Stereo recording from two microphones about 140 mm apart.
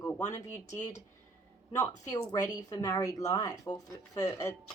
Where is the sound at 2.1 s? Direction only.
25° left (ahead or behind).